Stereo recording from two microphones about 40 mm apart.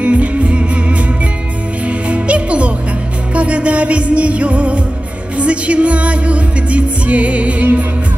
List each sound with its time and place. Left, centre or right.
0.0 s music: right